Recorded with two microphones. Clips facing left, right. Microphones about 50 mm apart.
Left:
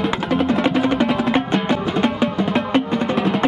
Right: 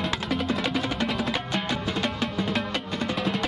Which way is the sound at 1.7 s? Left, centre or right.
Centre.